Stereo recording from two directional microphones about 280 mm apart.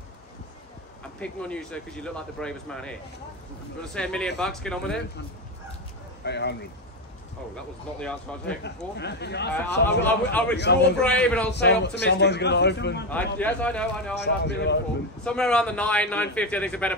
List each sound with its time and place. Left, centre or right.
1.2 s speech: centre
6.2 s a man's voice: left
8.0 s speech: centre
8.6 s a man's voice: left
11.0 s speech: centre
11.5 s a man's voice: left
13.1 s speech: centre
14.1 s a man's voice: left
15.2 s speech: centre